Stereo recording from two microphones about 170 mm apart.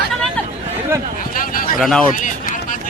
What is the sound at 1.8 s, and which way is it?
Speech, centre (ahead or behind).